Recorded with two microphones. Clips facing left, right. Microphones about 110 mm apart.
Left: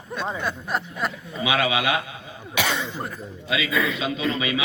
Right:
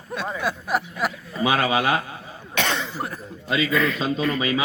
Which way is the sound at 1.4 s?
40° right (ahead or behind).